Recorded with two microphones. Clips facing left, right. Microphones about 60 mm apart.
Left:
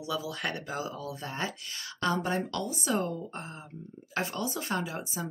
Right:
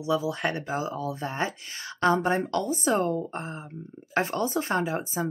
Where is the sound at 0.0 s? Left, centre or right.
Right.